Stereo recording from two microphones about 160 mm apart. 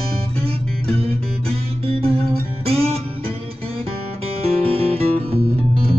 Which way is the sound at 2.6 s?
40° right (ahead or behind).